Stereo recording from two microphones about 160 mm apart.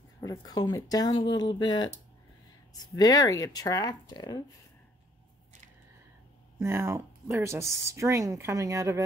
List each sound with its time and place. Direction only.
0.2 s speech: 25° left (ahead or behind)
6.6 s speech: 15° right (ahead or behind)